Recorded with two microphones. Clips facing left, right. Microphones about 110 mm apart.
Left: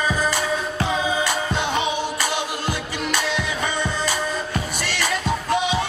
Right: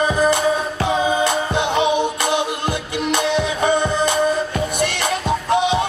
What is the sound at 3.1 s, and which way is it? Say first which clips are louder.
Music: right 6 dB; 60° right (ahead or behind).